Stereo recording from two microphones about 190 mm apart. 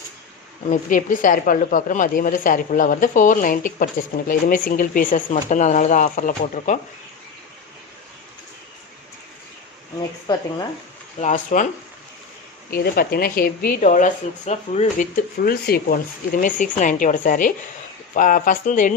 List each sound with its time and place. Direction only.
0.7 s a woman's voice: 45° left (ahead or behind)
11.2 s speech: 40° left (ahead or behind)
12.7 s a woman's voice: 55° left (ahead or behind); by 15.0 s 35° left (ahead or behind)
15.1 s a woman's voice: 50° left (ahead or behind)